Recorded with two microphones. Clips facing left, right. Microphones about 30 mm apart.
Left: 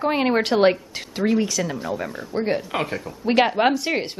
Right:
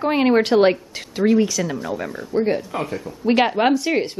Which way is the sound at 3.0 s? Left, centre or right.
Centre.